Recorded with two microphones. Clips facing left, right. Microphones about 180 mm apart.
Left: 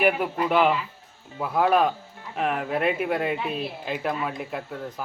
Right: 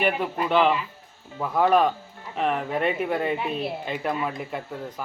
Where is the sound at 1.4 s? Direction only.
5° left (ahead or behind).